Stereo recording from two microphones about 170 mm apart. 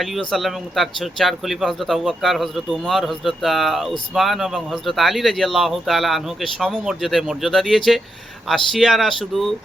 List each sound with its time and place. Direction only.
0.0 s speech: centre (ahead or behind)